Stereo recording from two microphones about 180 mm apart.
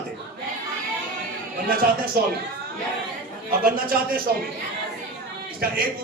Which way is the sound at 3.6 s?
55° right (ahead or behind).